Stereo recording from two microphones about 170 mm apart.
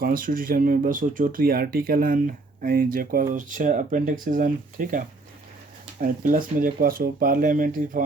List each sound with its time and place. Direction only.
0.0 s speech: 55° right (ahead or behind)